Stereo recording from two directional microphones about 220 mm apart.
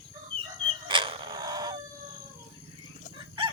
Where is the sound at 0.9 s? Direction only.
20° right (ahead or behind).